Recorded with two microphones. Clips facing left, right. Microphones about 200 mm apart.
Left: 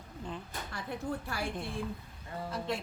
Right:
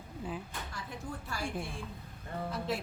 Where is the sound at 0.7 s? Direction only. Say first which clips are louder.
Left 8 dB; 60° left (ahead or behind).